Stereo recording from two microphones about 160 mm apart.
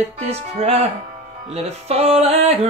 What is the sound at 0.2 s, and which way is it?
Music, 40° right (ahead or behind).